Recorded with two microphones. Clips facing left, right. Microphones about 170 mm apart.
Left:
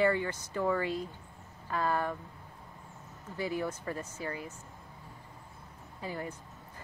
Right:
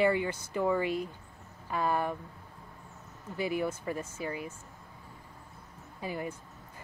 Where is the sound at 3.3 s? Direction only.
15° right (ahead or behind).